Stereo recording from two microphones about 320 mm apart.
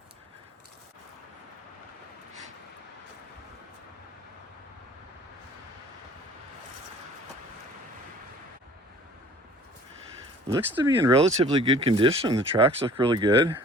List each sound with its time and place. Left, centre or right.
10.5 s speech: centre